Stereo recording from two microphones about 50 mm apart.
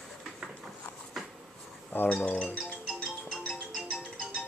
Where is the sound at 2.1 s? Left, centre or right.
Left.